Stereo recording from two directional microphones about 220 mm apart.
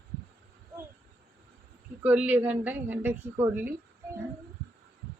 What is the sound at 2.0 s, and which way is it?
Speech, 5° right (ahead or behind).